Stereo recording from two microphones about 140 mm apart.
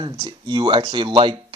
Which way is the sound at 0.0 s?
30° right (ahead or behind).